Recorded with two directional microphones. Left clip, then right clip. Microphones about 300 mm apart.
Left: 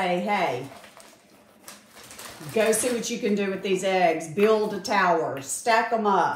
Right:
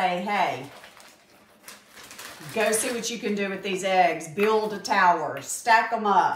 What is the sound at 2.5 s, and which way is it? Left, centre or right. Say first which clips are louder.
A woman's voice: left 2 dB; centre.